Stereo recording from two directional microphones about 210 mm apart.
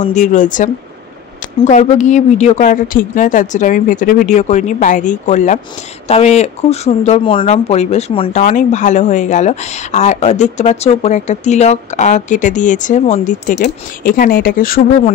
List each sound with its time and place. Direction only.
0.0 s speech: 35° left (ahead or behind)